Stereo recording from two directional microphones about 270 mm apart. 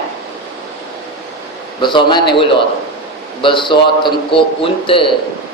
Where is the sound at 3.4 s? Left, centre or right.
Centre.